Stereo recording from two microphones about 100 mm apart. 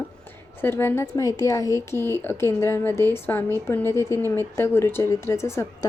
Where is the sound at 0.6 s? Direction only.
25° left (ahead or behind).